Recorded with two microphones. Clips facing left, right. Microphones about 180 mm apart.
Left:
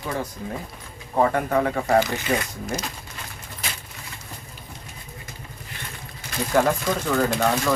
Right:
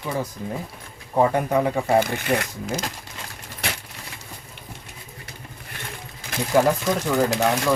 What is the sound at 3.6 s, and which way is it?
Keys jangling, 65° right (ahead or behind).